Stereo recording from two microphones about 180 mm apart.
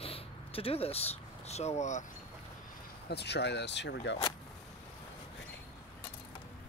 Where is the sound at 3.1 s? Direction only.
70° left (ahead or behind).